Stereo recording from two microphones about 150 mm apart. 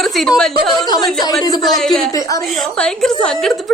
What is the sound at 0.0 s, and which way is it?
Speech, centre (ahead or behind).